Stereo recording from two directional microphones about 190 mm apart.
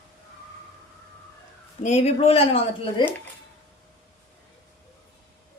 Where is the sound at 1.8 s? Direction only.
35° left (ahead or behind).